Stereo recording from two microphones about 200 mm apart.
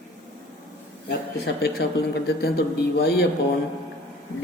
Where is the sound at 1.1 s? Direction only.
55° left (ahead or behind).